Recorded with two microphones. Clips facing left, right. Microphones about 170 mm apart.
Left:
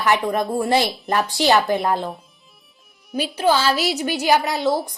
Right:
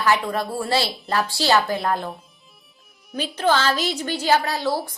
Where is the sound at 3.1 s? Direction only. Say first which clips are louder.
Left 2 dB; 10° left (ahead or behind).